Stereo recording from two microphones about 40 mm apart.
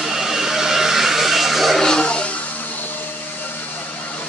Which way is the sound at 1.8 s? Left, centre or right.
Centre.